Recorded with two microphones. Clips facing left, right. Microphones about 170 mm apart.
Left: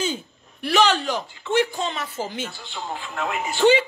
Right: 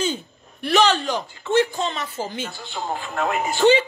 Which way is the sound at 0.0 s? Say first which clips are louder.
Right 2 dB; 5° left (ahead or behind).